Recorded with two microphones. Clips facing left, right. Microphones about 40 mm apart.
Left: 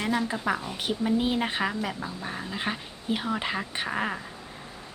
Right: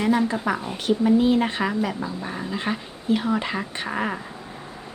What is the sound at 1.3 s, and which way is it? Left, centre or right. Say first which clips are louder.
A woman's voice: right 5 dB; centre.